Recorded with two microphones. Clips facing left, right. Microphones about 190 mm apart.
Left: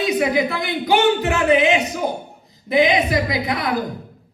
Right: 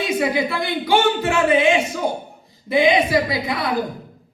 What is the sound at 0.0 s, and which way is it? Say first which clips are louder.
Speech: left 2 dB; 20° left (ahead or behind).